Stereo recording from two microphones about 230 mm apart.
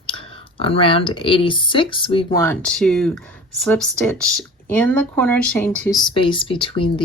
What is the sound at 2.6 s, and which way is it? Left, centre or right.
Speech, centre.